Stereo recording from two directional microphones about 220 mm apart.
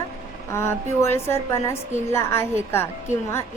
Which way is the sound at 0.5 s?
10° left (ahead or behind).